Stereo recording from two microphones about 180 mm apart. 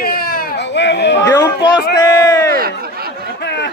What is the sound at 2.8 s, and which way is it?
Snicker, 60° right (ahead or behind).